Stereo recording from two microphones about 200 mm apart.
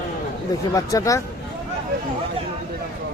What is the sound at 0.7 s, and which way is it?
Speech, 15° left (ahead or behind).